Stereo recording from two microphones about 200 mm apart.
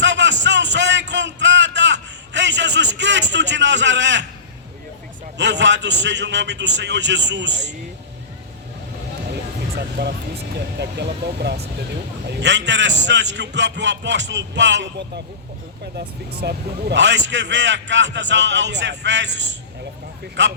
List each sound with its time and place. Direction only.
0.0 s a sound: 65° right (ahead or behind)
5.4 s a man's voice: 65° right (ahead or behind)
9.7 s a man's voice: 55° right (ahead or behind)
16.4 s a man's voice: 55° right (ahead or behind)